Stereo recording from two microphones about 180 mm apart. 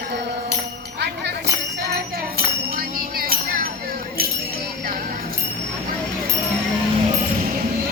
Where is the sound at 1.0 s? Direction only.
65° right (ahead or behind).